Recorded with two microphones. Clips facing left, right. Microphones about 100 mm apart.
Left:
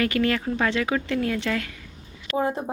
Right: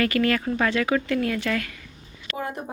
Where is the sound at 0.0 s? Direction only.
20° left (ahead or behind).